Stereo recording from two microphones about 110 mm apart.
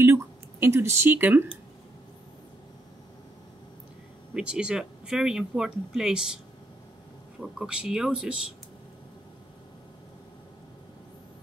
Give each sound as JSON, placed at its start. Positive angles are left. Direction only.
{"t": 0.0, "sound": "a sound", "side_deg": -25}
{"t": 4.3, "sound": "speech", "side_deg": -10}
{"t": 7.3, "sound": "speech", "side_deg": -5}